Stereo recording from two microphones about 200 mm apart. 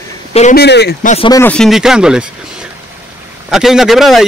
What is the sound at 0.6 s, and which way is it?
Speech, 55° left (ahead or behind).